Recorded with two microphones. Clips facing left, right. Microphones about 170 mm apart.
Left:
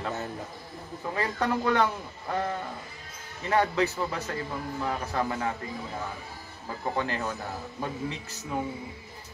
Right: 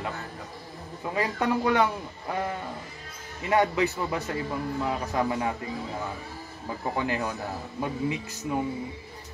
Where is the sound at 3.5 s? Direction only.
15° right (ahead or behind).